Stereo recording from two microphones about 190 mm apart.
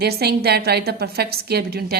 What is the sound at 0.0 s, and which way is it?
A woman's voice, 55° right (ahead or behind).